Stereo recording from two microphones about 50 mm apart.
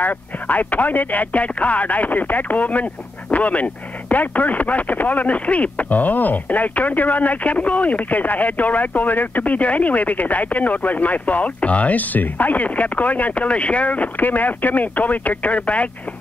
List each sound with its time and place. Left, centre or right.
0.0 s speech: left